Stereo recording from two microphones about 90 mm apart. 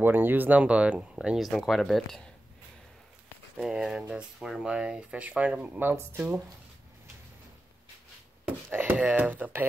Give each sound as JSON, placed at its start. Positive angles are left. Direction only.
{"t": 0.0, "sound": "speech", "side_deg": -20}
{"t": 3.5, "sound": "speech", "side_deg": -5}
{"t": 8.5, "sound": "a sound", "side_deg": -25}
{"t": 8.9, "sound": "speech", "side_deg": -15}